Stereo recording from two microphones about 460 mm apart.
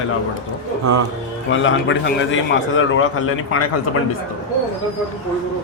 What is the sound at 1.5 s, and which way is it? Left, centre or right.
A man's voice, left.